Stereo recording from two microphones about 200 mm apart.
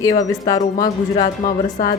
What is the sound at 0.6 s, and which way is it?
Speech, 35° left (ahead or behind).